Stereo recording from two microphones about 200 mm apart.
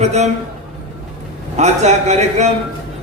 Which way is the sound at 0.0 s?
35° right (ahead or behind).